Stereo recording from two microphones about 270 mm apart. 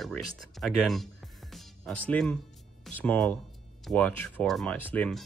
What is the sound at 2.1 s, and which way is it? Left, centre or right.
Speech, centre.